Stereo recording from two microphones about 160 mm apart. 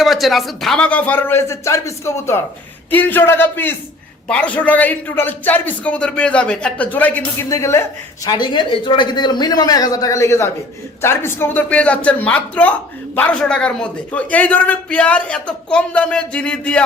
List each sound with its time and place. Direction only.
0.0 s a man's voice: centre (ahead or behind)